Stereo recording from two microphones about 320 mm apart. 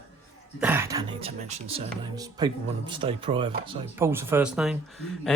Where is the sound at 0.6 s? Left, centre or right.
Centre.